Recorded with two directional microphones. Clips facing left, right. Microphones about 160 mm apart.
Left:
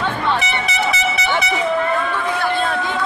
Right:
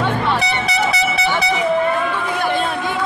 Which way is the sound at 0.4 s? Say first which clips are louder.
Right 2 dB; 35° right (ahead or behind).